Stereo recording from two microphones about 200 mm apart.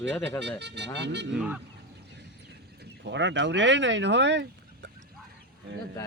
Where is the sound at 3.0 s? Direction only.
65° right (ahead or behind).